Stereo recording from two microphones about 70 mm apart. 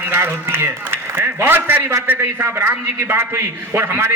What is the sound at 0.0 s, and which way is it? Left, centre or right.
A man's voice, right.